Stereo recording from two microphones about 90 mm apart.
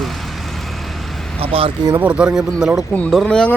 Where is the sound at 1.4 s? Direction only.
90° right.